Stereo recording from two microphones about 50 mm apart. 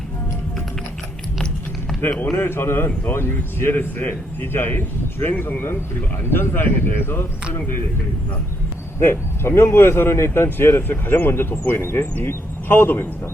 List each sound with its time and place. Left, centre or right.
2.3 s a man's voice: left
9.0 s a man's voice: left